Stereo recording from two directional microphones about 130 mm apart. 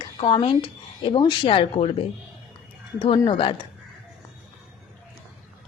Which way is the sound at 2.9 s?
40° left (ahead or behind).